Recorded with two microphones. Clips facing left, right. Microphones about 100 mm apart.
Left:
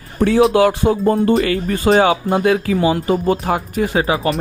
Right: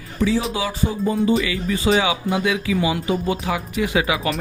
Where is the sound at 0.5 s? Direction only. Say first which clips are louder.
Left 10 dB; 65° left (ahead or behind).